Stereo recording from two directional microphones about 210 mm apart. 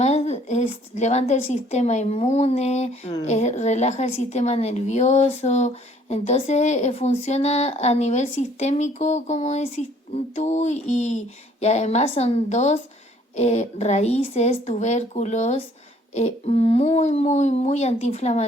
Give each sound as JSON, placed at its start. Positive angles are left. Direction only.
{"t": 0.0, "sound": "a woman's voice", "side_deg": 30}